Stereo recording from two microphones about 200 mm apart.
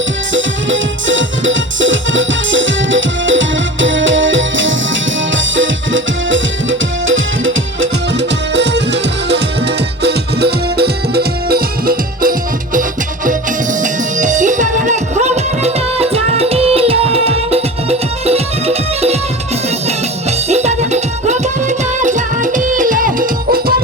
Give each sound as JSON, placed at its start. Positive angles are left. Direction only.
{"t": 0.3, "sound": "music", "side_deg": -70}
{"t": 8.5, "sound": "music", "side_deg": -60}
{"t": 13.8, "sound": "music", "side_deg": -40}
{"t": 20.5, "sound": "music", "side_deg": -35}